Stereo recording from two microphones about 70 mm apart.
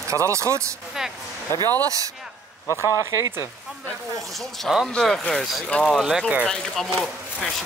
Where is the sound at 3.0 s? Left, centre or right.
Right.